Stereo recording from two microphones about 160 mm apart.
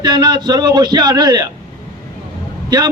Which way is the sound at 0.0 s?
25° right (ahead or behind).